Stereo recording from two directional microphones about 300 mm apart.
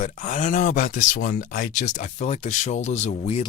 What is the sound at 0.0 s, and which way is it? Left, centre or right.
Speech, left.